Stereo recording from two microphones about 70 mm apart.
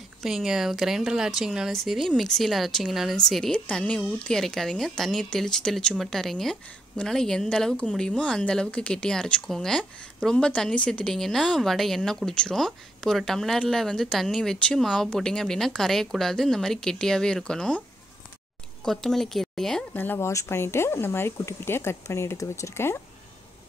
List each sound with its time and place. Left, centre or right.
0.2 s speech: centre
3.5 s speech: centre
18.9 s speech: centre
19.9 s speech: left